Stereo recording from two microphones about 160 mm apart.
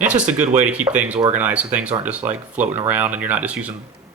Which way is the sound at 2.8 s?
10° right (ahead or behind).